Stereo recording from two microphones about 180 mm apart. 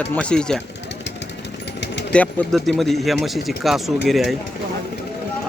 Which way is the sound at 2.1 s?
5° left (ahead or behind).